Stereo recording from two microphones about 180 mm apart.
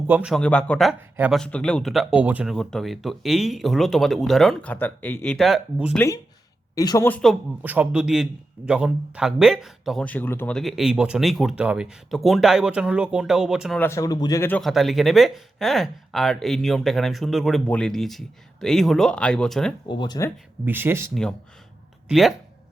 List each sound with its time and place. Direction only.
0.1 s speech: 5° right (ahead or behind)
0.3 s a man's voice: 5° left (ahead or behind)
6.7 s speech: 20° left (ahead or behind)
7.6 s a man's voice: 10° right (ahead or behind)
13.7 s speech: 15° left (ahead or behind)
14.6 s a man's voice: centre (ahead or behind)
19.9 s speech: 25° left (ahead or behind)
20.7 s speech: 10° right (ahead or behind)
22.1 s a man's voice: centre (ahead or behind)